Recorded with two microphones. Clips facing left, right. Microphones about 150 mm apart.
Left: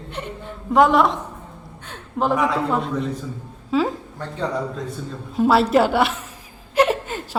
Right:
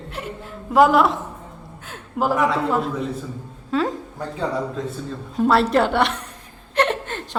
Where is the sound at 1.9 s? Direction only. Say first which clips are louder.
Left 1 dB; 5° right (ahead or behind).